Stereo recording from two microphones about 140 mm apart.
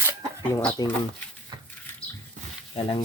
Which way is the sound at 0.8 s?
30° left (ahead or behind).